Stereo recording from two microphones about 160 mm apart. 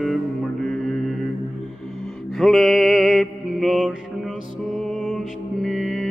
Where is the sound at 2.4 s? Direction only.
Centre (ahead or behind).